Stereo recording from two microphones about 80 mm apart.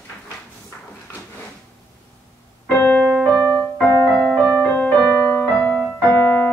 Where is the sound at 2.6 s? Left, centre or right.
Left.